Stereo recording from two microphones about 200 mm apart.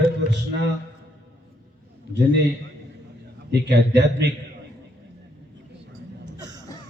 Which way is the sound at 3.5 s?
60° right (ahead or behind).